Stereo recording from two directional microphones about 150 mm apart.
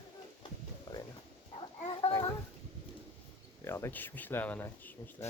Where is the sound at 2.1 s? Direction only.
25° left (ahead or behind).